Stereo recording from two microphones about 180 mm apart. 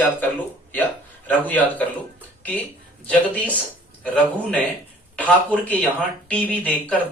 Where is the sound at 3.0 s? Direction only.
10° left (ahead or behind).